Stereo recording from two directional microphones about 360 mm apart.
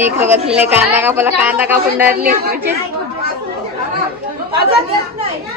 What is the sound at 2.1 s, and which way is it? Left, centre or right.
Speech, right.